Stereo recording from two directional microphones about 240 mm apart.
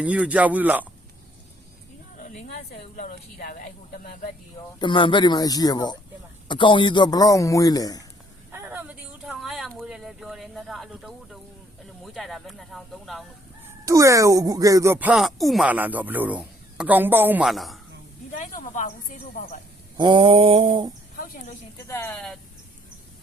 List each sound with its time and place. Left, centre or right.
0.0 s speech: centre
2.1 s a woman's voice: left
4.8 s a man's voice: left
8.5 s a sound: centre
12.0 s speech: centre
13.8 s speech: centre
18.3 s a sound: left
20.0 s mantra: right
21.2 s a sound: left
21.8 s a man's voice: centre